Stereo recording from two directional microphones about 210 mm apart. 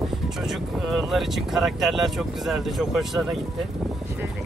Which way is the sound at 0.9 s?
Centre (ahead or behind).